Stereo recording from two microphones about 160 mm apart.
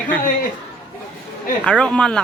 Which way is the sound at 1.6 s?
5° left (ahead or behind).